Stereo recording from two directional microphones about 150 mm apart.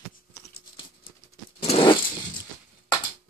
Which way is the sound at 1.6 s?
35° left (ahead or behind).